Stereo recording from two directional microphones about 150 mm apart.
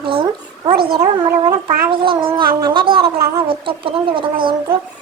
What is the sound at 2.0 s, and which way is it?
Speech, 35° right (ahead or behind).